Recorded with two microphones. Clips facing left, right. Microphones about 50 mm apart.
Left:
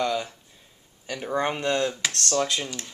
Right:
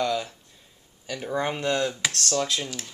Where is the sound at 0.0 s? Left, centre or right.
Centre.